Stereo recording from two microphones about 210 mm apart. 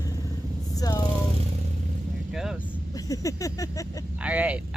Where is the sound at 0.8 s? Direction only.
20° left (ahead or behind).